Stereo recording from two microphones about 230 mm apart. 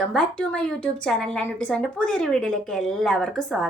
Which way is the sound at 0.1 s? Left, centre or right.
Centre.